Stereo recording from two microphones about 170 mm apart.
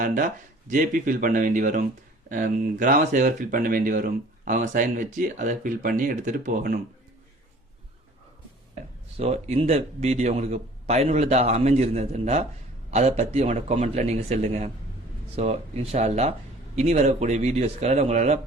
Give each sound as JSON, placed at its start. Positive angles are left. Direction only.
{"t": 0.0, "sound": "speech", "side_deg": -50}
{"t": 8.7, "sound": "speech", "side_deg": -40}